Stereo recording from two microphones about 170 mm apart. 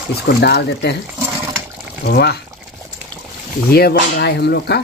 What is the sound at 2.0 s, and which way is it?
Speech, 70° left (ahead or behind).